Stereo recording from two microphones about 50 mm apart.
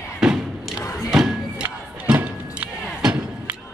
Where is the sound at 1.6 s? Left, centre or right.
Right.